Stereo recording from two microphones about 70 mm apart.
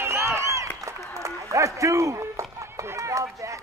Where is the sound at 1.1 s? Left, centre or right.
Right.